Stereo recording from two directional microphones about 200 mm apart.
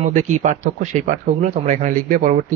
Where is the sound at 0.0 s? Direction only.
35° right (ahead or behind).